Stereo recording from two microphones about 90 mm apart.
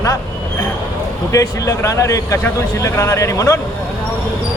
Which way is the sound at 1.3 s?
40° left (ahead or behind).